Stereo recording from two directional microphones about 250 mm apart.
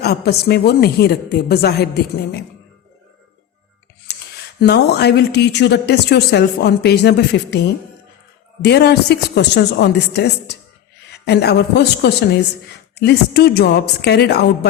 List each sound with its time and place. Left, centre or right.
0.0 s speech: left
4.6 s speech: left
8.6 s speech: left